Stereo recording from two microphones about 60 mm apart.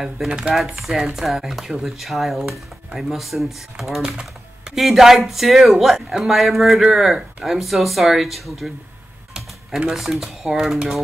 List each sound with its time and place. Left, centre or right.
0.3 s speech: centre
0.6 s speech: centre
9.8 s speech: centre